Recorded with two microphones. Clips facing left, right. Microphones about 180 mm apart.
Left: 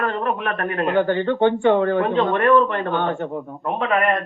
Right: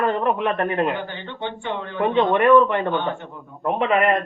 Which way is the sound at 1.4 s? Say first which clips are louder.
Left 12 dB; 55° left (ahead or behind).